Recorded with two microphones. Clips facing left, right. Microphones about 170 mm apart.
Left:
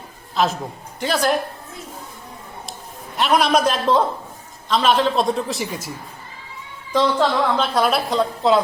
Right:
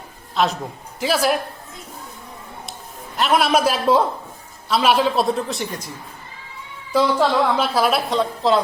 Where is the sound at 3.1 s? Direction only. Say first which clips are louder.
Even; centre (ahead or behind).